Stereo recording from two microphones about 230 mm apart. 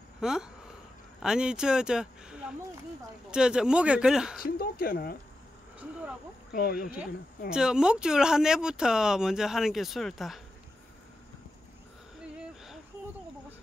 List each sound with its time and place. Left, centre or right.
0.2 s speech: centre
4.4 s speech: left
6.5 s speech: left
7.0 s speech: centre
12.2 s a sound: centre